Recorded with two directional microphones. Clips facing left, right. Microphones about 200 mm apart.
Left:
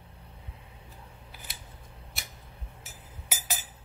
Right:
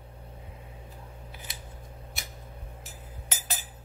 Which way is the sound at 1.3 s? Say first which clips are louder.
Right 1 dB; centre (ahead or behind).